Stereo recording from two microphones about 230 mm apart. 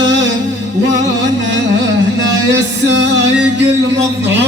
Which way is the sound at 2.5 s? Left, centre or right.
Right.